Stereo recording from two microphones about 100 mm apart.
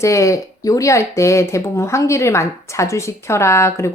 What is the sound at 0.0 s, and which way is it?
A woman's voice, 30° left (ahead or behind).